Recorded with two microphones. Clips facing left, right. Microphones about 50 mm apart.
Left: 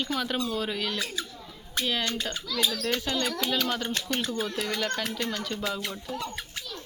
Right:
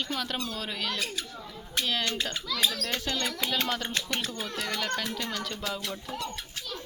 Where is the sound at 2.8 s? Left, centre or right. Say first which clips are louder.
Left 3 dB; centre.